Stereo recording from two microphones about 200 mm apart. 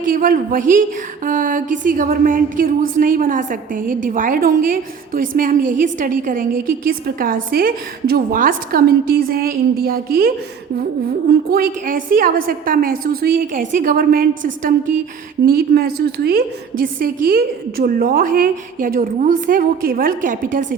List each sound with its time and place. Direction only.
0.0 s a woman's voice: 45° right (ahead or behind)